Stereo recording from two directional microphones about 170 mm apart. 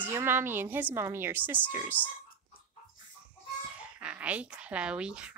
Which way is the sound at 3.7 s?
5° right (ahead or behind).